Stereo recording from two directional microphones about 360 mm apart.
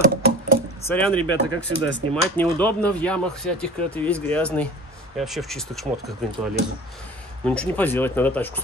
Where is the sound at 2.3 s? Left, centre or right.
Centre.